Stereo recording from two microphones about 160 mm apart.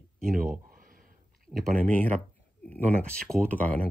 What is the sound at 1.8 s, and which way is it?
Speech, 10° left (ahead or behind).